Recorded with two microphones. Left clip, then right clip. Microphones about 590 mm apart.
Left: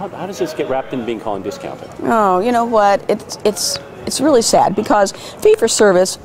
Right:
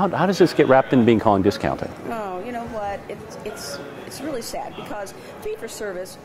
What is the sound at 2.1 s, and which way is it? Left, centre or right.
Speech, left.